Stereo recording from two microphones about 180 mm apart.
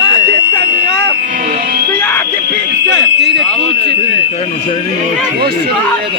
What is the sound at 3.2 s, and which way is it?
Fire alarm, 70° right (ahead or behind).